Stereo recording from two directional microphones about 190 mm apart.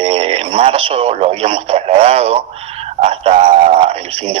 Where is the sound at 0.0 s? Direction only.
30° right (ahead or behind).